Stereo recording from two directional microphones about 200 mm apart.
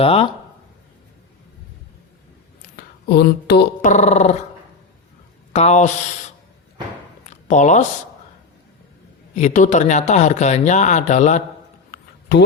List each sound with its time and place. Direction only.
0.0 s speech: 30° left (ahead or behind)
2.7 s speech: 55° left (ahead or behind)
3.8 s speech: 35° left (ahead or behind)
5.5 s speech: 35° left (ahead or behind)
7.3 s a sound: 35° left (ahead or behind)
9.3 s speech: 35° left (ahead or behind)